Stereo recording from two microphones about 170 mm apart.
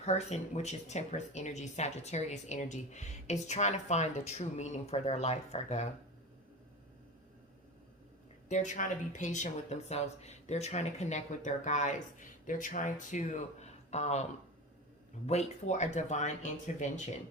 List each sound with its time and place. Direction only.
0.0 s speech: 40° left (ahead or behind)
8.4 s speech: 45° left (ahead or behind)
15.3 s speech: 40° left (ahead or behind)